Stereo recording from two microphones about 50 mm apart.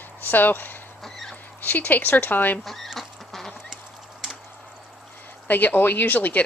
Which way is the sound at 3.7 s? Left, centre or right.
Centre.